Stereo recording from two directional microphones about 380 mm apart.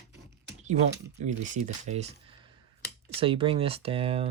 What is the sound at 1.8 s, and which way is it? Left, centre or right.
Speech, centre.